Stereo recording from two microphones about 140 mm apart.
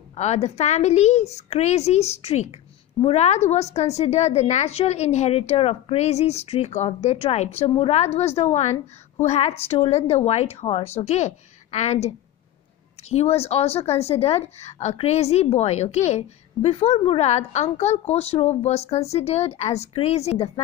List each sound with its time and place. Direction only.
0.1 s a woman's voice: 50° left (ahead or behind)
13.1 s a woman's voice: 50° left (ahead or behind)